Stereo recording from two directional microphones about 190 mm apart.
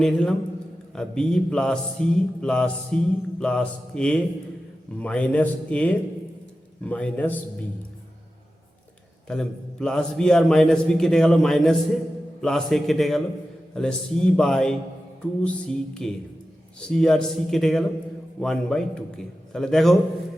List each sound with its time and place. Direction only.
0.0 s a man's voice: 5° left (ahead or behind)
9.2 s a man's voice: 5° left (ahead or behind)